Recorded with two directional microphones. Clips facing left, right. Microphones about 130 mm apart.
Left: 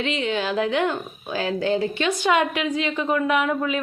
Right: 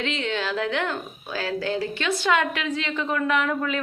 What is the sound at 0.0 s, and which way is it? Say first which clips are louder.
A woman's voice: left 3 dB; 15° left (ahead or behind).